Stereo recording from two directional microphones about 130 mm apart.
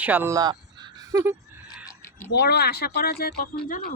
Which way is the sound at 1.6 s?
20° left (ahead or behind).